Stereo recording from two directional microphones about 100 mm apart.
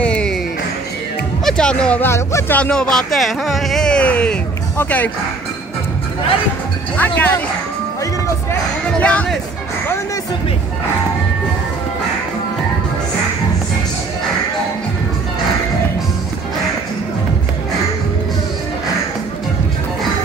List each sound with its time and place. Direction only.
0.0 s music: 10° left (ahead or behind)
1.4 s music: 5° left (ahead or behind)
2.0 s speech: 25° left (ahead or behind)
2.5 s speech: 10° left (ahead or behind)
7.0 s speech: 15° left (ahead or behind)
9.0 s speech: 10° left (ahead or behind)